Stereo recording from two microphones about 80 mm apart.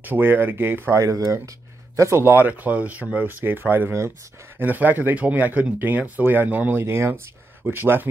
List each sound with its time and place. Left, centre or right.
0.0 s speech: right
0.9 s speech: right
2.0 s speech: right
6.8 s speech: right